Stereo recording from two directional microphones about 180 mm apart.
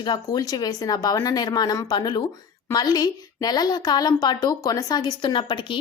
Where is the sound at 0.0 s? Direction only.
20° left (ahead or behind).